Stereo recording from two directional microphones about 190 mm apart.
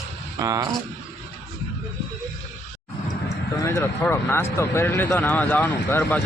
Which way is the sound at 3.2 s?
15° left (ahead or behind).